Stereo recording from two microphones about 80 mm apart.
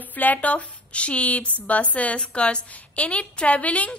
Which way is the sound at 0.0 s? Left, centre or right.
Left.